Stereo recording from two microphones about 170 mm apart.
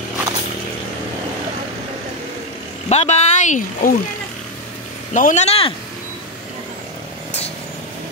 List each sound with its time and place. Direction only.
2.9 s speech: 40° left (ahead or behind)
5.1 s speech: 45° left (ahead or behind)